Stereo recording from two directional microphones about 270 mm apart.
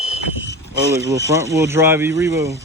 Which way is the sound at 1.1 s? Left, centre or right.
Centre.